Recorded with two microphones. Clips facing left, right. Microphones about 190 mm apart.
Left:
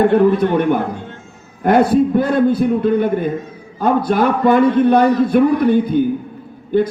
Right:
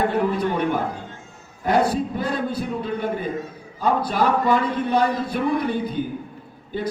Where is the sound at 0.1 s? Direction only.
60° left (ahead or behind).